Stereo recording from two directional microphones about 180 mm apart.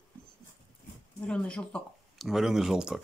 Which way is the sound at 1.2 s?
5° left (ahead or behind).